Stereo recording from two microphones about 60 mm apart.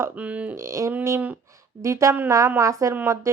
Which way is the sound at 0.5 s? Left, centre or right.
Right.